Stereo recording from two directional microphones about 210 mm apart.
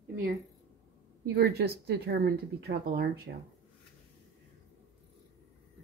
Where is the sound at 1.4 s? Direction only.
50° right (ahead or behind).